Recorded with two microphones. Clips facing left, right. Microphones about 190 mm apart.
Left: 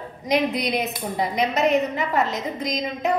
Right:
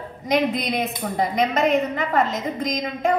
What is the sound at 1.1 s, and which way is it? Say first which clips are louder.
A woman's voice: right 2 dB; 50° right (ahead or behind).